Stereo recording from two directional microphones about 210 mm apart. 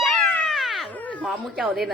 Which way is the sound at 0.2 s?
5° left (ahead or behind).